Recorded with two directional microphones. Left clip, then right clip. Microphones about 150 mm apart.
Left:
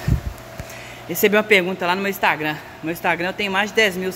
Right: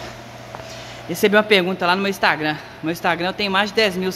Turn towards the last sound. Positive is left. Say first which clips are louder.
# even
turn(degrees=-10)  # may be behind; listen again after turning